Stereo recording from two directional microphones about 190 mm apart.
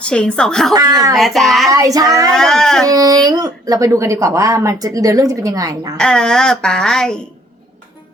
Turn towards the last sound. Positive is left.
turn(degrees=5)  # may be behind; listen again after turning